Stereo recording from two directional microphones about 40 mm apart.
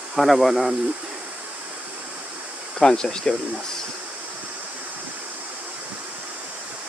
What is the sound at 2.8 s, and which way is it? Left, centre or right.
Speech, centre.